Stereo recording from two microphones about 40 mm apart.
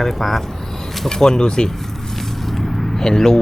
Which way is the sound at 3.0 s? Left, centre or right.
Centre.